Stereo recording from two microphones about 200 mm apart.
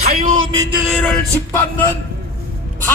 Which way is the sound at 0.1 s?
45° right (ahead or behind).